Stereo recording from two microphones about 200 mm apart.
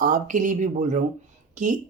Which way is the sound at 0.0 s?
40° right (ahead or behind).